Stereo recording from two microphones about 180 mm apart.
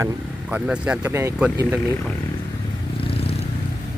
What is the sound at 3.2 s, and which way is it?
Vehicle, 35° left (ahead or behind).